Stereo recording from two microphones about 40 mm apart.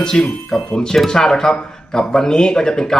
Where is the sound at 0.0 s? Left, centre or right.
Centre.